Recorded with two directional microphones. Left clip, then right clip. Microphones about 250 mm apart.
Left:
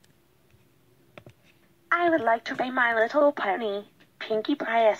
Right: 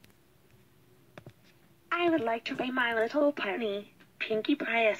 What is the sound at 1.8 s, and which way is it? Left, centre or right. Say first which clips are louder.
A woman's voice: left 6 dB; centre.